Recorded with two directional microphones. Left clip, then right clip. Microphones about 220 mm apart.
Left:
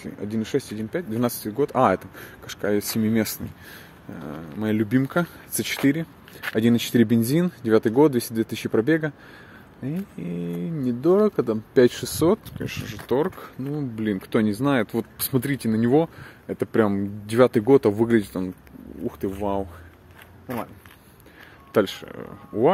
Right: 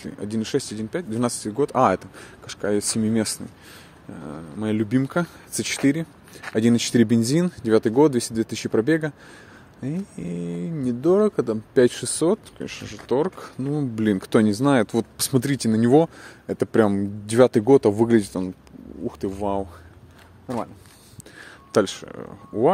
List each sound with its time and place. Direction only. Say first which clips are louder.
0.0 s speech: right 1 dB; 5° right (ahead or behind)
13.7 s speech: right 4 dB; 20° right (ahead or behind)
21.7 s speech: right 1 dB; 10° right (ahead or behind)